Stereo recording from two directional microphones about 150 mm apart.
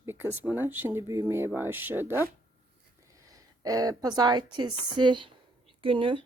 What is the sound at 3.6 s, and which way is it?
Speech, 25° right (ahead or behind).